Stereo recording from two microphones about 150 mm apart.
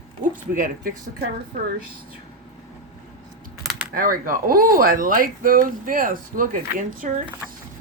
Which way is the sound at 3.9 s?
70° right (ahead or behind).